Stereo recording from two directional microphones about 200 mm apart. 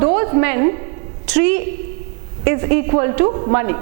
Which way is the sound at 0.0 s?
15° right (ahead or behind).